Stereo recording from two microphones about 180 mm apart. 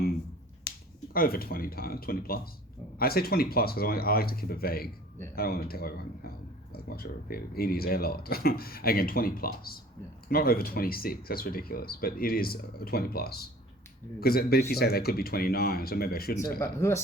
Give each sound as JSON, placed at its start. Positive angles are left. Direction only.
{"t": 0.7, "sound": "finger snapping", "side_deg": 65}
{"t": 1.1, "sound": "speech", "side_deg": 55}
{"t": 16.4, "sound": "speech", "side_deg": 15}